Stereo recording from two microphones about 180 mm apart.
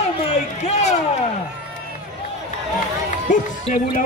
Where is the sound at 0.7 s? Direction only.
40° left (ahead or behind).